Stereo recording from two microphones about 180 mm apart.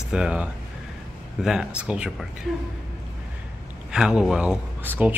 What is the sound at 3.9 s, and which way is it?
Speech, 5° right (ahead or behind).